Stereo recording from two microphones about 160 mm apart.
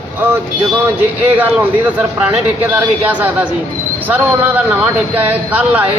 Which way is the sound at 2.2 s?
10° right (ahead or behind).